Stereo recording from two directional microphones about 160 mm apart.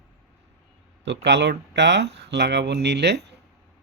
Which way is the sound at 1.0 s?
90° right.